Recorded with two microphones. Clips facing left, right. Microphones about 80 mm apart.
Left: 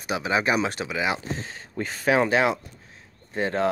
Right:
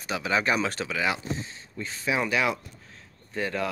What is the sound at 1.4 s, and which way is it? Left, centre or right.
Speech, left.